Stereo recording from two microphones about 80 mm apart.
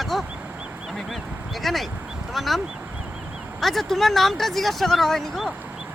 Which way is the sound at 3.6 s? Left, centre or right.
Centre.